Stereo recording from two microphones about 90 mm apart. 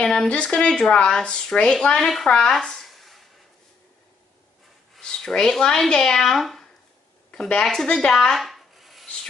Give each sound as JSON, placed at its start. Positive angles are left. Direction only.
{"t": 0.0, "sound": "speech", "side_deg": 10}
{"t": 4.9, "sound": "speech", "side_deg": 5}
{"t": 7.2, "sound": "rub", "side_deg": 10}